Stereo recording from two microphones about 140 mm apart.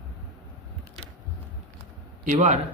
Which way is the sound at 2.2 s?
65° right (ahead or behind).